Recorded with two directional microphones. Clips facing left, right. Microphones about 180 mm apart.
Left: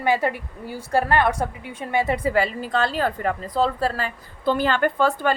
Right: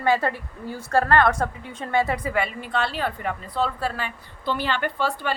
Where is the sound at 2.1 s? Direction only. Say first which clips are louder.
Left 4 dB; 30° left (ahead or behind).